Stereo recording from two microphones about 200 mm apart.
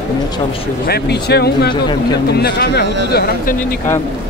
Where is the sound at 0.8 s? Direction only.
55° left (ahead or behind).